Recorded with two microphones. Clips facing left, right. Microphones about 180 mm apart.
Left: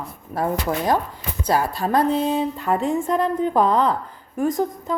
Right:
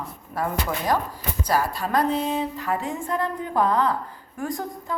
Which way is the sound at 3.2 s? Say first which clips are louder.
Left 2 dB; 20° left (ahead or behind).